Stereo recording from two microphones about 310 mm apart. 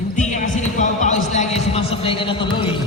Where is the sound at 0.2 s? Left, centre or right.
Left.